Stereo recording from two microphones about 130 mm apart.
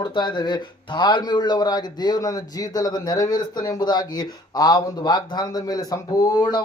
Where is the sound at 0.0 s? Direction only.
35° left (ahead or behind).